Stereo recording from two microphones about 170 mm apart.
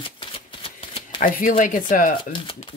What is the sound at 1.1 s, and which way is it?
Speech, 55° left (ahead or behind).